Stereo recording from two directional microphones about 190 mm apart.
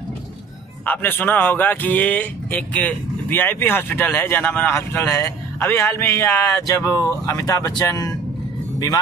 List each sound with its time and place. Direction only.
0.8 s speech: 10° left (ahead or behind)